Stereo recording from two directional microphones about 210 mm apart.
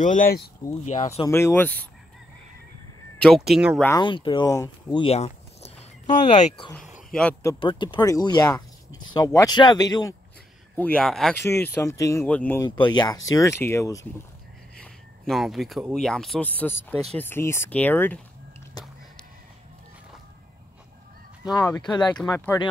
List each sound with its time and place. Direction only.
0.0 s speech: 40° left (ahead or behind)
1.2 s speech: 10° left (ahead or behind)
3.3 s speech: centre (ahead or behind)
4.0 s speech: 25° left (ahead or behind)
5.0 s a sound: 30° left (ahead or behind)
6.3 s speech: 25° left (ahead or behind)
6.7 s speech: centre (ahead or behind)
7.6 s speech: 20° left (ahead or behind)
10.8 s speech: 5° left (ahead or behind)
12.6 s speech: 20° left (ahead or behind)
14.8 s speech: centre (ahead or behind)
18.8 s a sound: 20° left (ahead or behind)
21.5 s speech: 20° left (ahead or behind)